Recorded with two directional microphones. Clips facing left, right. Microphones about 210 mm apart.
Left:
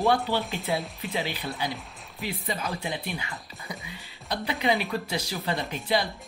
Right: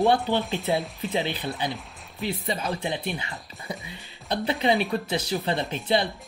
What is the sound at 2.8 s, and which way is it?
Speech, 25° right (ahead or behind).